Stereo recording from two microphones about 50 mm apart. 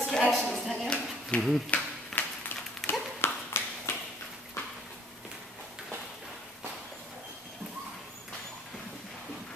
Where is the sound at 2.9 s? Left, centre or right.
Left.